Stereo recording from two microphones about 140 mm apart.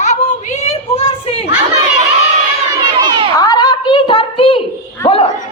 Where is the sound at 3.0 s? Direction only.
30° right (ahead or behind).